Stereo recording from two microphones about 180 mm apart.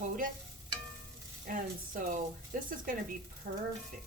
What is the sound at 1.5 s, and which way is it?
A woman's voice, 50° right (ahead or behind).